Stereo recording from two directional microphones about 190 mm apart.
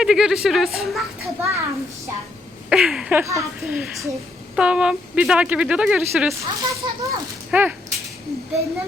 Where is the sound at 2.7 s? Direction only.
5° right (ahead or behind).